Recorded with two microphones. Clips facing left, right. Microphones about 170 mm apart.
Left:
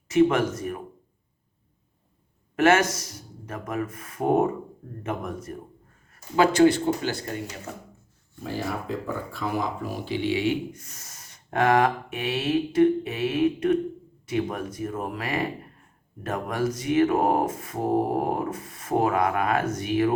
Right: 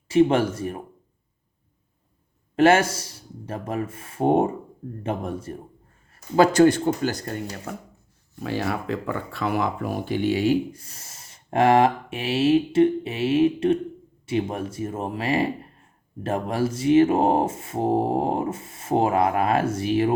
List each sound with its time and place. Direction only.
0.1 s speech: 30° right (ahead or behind)
2.6 s speech: 30° right (ahead or behind)
8.4 s speech: 75° right (ahead or behind); by 20.1 s 30° right (ahead or behind)